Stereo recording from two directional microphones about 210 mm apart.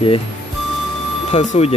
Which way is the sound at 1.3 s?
30° left (ahead or behind).